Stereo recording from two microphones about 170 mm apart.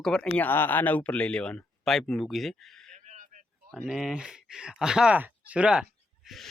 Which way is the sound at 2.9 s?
45° right (ahead or behind).